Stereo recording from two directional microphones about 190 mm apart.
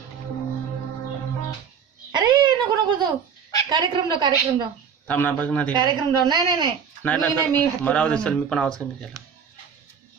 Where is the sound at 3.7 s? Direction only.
25° right (ahead or behind).